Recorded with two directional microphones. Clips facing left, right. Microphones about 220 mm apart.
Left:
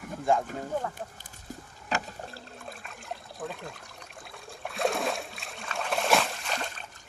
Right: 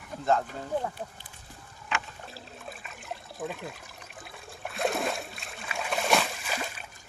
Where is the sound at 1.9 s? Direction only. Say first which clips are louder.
Left 3 dB; 40° left (ahead or behind).